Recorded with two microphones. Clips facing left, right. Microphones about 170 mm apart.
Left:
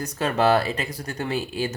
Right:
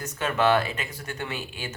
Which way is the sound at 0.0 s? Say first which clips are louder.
Left 3 dB; 35° left (ahead or behind).